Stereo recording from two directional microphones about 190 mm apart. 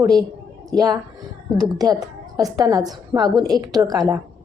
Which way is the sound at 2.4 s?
20° right (ahead or behind).